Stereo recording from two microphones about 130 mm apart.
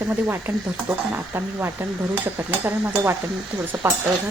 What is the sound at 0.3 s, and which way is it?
Speech, 15° right (ahead or behind).